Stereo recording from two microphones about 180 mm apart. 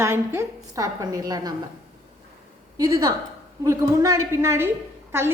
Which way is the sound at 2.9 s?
25° right (ahead or behind).